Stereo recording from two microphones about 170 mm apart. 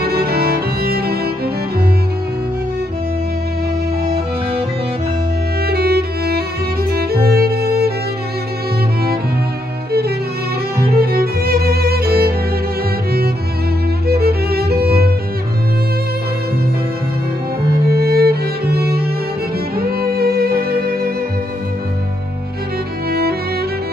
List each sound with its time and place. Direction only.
0.0 s music: 65° right (ahead or behind)
5.7 s music: 65° right (ahead or behind)
10.9 s violin: 60° right (ahead or behind)
14.0 s music: 65° right (ahead or behind)
17.6 s music: 65° right (ahead or behind)